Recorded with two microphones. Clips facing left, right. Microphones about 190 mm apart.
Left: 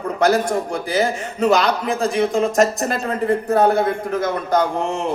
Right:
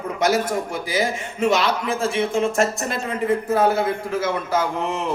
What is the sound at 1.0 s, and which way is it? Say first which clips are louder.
A man's voice: left 2 dB; 35° left (ahead or behind).